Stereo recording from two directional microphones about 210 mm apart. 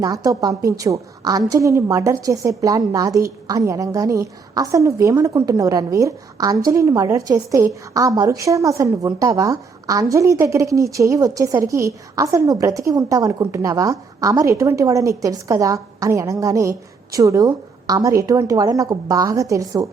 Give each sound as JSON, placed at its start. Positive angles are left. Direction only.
{"t": 0.0, "sound": "a woman's voice", "side_deg": -15}